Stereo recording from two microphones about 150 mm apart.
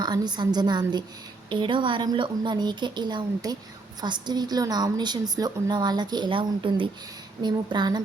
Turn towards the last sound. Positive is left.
turn(degrees=-30)  # may be behind; listen again after turning